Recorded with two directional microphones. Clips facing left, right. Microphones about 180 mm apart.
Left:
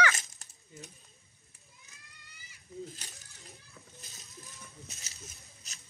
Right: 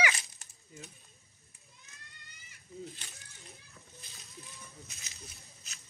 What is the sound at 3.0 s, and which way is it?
Speech, 40° left (ahead or behind).